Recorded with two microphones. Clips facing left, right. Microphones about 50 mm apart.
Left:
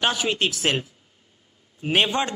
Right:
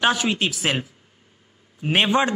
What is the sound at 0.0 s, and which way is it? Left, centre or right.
Speech, centre.